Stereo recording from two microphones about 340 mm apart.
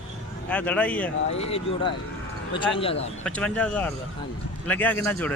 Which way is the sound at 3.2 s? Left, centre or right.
Centre.